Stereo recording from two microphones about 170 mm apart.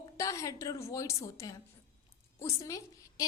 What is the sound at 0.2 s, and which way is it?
A woman's voice, 20° left (ahead or behind).